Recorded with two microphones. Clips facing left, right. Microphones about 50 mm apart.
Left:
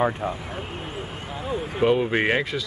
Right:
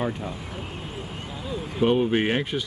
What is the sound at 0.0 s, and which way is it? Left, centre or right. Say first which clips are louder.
Speech: left 5 dB; left.